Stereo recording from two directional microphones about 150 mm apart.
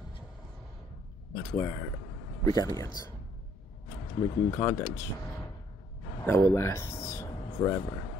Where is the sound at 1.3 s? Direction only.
30° left (ahead or behind).